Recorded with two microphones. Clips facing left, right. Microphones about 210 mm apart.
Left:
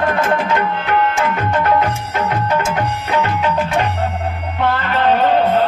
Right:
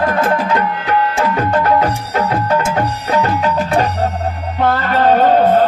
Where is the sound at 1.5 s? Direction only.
40° right (ahead or behind).